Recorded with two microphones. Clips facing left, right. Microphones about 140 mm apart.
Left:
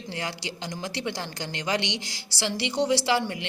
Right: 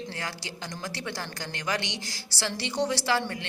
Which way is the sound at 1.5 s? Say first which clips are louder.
Left 3 dB; 20° left (ahead or behind).